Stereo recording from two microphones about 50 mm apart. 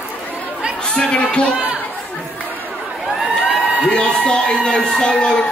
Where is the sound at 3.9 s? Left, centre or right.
Centre.